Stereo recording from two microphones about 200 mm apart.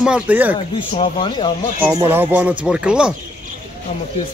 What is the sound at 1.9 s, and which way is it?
Speech, 15° right (ahead or behind).